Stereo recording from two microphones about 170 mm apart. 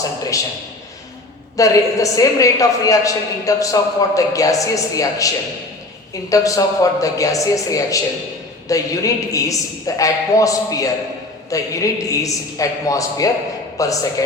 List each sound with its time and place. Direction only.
1.5 s a woman's voice: 20° left (ahead or behind)
6.3 s a woman's voice: 20° left (ahead or behind)